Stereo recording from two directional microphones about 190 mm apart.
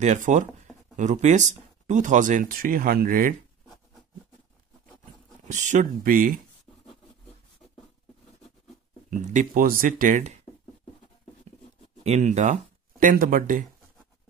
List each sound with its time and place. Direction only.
0.0 s speech: 40° right (ahead or behind)
5.5 s speech: 40° right (ahead or behind)
9.1 s speech: 40° right (ahead or behind)
12.0 s speech: 35° right (ahead or behind)